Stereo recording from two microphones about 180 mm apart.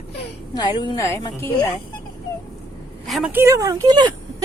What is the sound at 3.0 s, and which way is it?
Speech, centre (ahead or behind).